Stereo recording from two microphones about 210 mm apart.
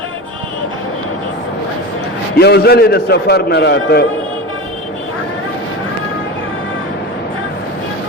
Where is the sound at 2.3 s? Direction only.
50° left (ahead or behind).